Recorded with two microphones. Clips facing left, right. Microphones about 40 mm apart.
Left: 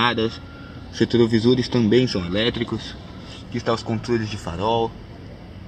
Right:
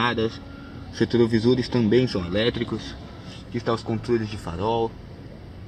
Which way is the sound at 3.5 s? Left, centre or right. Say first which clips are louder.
Left 2 dB; left.